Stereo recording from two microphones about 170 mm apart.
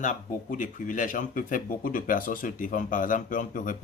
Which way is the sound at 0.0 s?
50° left (ahead or behind).